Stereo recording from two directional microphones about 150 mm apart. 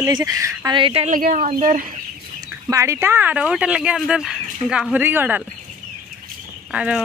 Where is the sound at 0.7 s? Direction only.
40° right (ahead or behind).